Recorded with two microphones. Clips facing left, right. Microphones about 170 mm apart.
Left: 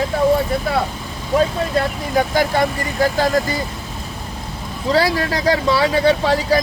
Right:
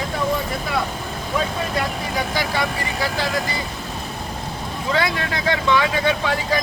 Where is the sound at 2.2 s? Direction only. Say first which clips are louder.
Left 8 dB; 50° left (ahead or behind).